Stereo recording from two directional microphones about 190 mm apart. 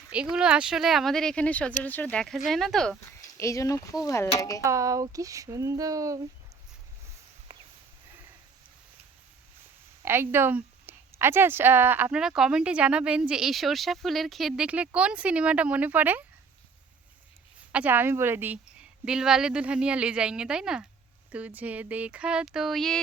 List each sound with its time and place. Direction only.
0.1 s speech: 5° right (ahead or behind)
3.2 s speech: 15° left (ahead or behind)
4.6 s a woman's voice: 15° right (ahead or behind)
10.0 s a woman's voice: 10° right (ahead or behind)
17.7 s a woman's voice: 10° right (ahead or behind)